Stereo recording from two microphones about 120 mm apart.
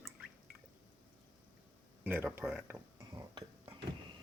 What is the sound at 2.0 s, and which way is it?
Speech, 15° right (ahead or behind).